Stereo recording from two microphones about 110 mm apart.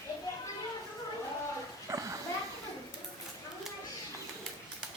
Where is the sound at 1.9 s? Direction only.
30° right (ahead or behind).